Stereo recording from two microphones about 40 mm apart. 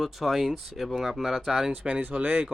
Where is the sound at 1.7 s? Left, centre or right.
Right.